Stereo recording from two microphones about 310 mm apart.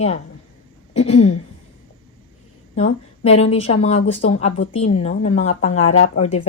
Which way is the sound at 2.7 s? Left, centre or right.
Centre.